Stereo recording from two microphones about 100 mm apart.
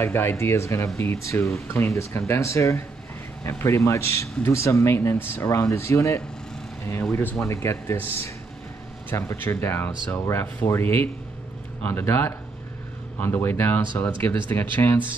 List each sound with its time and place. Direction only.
0.0 s speech: 25° left (ahead or behind)
9.1 s speech: 30° left (ahead or behind)